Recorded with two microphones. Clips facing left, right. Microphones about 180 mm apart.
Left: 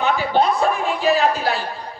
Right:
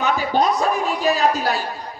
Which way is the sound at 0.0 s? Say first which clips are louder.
Left 1 dB; 40° right (ahead or behind).